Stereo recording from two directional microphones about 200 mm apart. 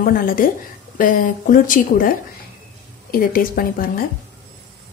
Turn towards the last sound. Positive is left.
turn(degrees=45)  # may be behind; listen again after turning